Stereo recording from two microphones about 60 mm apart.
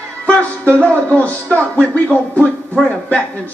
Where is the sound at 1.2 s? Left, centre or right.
Left.